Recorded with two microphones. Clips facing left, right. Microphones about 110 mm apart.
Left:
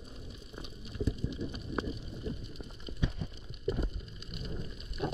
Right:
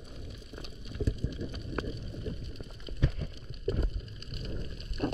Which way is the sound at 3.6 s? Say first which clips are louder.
Right 1 dB; 5° left (ahead or behind).